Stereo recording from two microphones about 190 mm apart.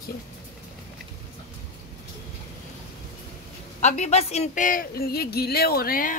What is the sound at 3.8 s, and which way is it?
A woman's voice, 35° left (ahead or behind).